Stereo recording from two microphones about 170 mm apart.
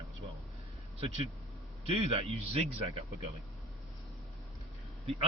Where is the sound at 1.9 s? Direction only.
35° right (ahead or behind).